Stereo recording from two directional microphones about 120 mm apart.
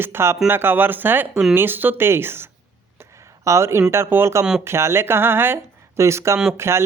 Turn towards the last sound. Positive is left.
turn(degrees=-20)  # may be behind; listen again after turning